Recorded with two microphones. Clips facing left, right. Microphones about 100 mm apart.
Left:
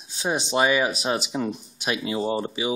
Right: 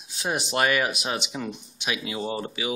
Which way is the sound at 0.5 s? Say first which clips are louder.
Left 3 dB; 20° left (ahead or behind).